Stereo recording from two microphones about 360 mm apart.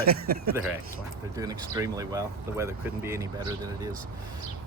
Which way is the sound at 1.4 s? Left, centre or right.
Centre.